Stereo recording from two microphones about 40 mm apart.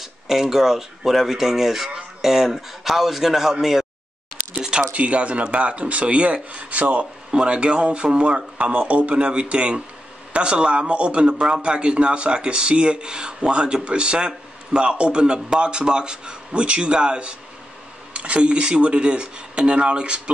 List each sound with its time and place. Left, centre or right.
0.0 s a man's voice: centre
4.6 s a sound: centre
4.9 s a man's voice: right